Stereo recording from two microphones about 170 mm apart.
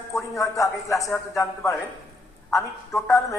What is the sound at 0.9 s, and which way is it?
Speech, centre (ahead or behind).